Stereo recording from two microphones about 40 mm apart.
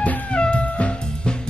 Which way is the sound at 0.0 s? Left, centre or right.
Left.